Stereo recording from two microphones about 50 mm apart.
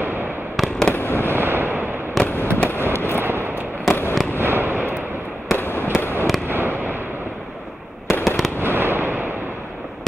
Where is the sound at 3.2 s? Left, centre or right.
Right.